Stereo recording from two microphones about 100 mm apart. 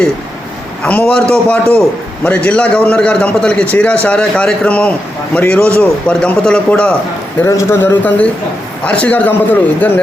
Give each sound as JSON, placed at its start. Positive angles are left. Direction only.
{"t": 0.8, "sound": "a man's voice", "side_deg": 10}
{"t": 7.4, "sound": "a man's voice", "side_deg": 30}